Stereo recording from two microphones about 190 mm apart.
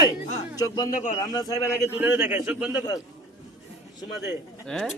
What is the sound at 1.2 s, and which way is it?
Speech, 20° left (ahead or behind).